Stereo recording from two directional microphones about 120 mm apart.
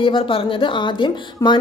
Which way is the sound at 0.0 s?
45° left (ahead or behind).